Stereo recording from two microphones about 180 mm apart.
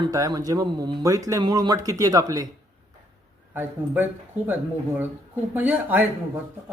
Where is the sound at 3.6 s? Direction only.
10° right (ahead or behind).